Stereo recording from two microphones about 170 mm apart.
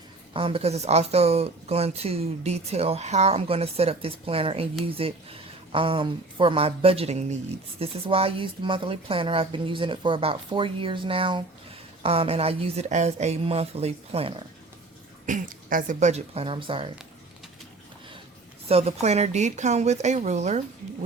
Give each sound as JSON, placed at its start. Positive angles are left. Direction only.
{"t": 0.3, "sound": "speech", "side_deg": -35}
{"t": 15.3, "sound": "speech", "side_deg": -45}
{"t": 18.7, "sound": "speech", "side_deg": -35}